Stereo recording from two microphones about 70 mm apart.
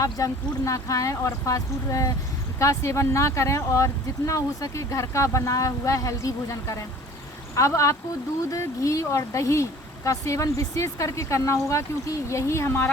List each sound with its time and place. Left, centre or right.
0.0 s speech: left